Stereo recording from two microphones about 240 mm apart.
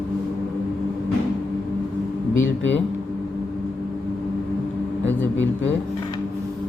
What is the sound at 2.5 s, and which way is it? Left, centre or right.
Speech, left.